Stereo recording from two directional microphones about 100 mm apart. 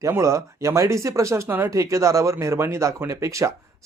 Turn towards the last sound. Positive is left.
turn(degrees=-30)  # may be behind; listen again after turning